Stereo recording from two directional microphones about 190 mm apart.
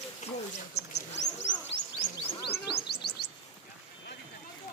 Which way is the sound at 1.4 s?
70° left (ahead or behind).